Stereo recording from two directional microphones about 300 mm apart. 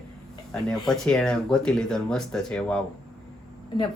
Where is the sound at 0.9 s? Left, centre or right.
Centre.